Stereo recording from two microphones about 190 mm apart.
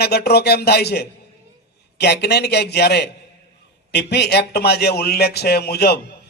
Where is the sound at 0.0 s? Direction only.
55° left (ahead or behind).